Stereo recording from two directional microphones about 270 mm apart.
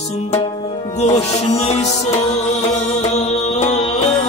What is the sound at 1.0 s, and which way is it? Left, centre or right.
Music, left.